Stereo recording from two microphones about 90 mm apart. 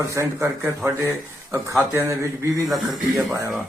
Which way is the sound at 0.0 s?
35° right (ahead or behind).